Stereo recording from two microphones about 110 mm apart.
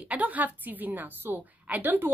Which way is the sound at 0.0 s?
10° right (ahead or behind).